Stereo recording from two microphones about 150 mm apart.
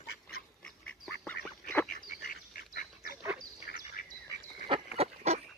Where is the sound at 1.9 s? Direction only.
70° left (ahead or behind).